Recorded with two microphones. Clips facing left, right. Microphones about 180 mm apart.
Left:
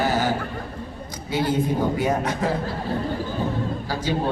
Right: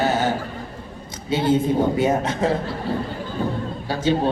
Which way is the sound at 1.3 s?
25° right (ahead or behind).